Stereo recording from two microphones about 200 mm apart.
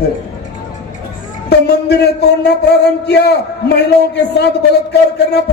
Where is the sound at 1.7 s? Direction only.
55° left (ahead or behind).